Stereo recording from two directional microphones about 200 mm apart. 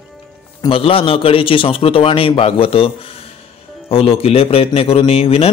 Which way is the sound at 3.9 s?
30° left (ahead or behind).